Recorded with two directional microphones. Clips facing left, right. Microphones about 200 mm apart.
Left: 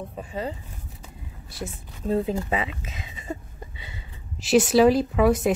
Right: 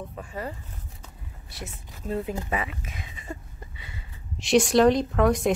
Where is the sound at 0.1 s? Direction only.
20° left (ahead or behind).